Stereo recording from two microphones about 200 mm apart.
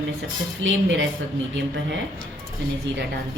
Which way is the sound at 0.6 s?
70° right (ahead or behind).